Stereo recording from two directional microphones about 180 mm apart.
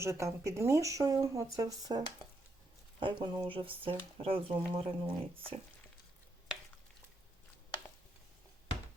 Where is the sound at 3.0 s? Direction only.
25° right (ahead or behind).